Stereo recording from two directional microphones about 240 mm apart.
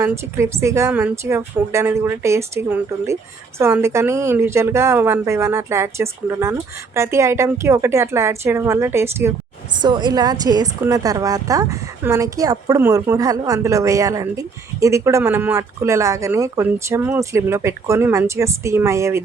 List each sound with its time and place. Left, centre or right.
0.0 s a woman's voice: centre